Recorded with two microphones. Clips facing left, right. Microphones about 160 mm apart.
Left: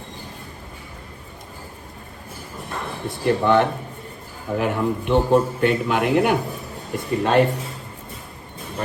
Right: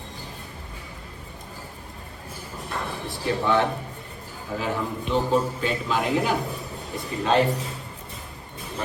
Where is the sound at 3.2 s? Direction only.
60° left (ahead or behind).